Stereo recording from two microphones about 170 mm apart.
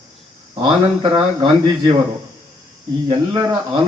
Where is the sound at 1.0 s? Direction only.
25° right (ahead or behind).